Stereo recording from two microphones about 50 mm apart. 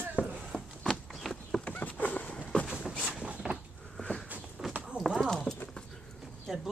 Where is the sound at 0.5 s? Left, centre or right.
Left.